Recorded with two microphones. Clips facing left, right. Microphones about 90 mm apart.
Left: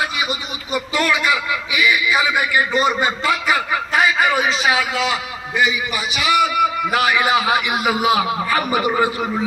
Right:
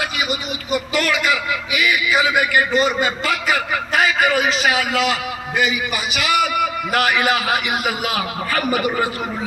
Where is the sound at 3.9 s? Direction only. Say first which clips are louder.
Even; 60° right (ahead or behind).